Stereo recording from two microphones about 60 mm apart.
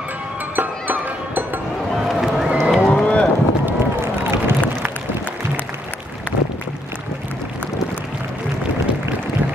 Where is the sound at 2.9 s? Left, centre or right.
Centre.